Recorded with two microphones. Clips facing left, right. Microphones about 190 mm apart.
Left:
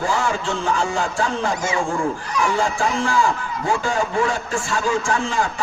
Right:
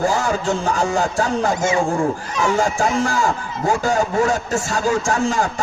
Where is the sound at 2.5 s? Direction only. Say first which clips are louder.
Right 5 dB; 45° right (ahead or behind).